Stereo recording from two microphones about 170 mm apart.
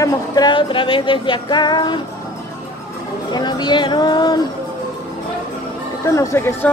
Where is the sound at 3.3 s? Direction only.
25° left (ahead or behind).